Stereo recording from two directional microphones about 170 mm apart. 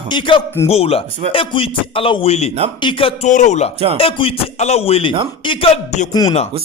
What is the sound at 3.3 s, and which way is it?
Speech, 45° left (ahead or behind).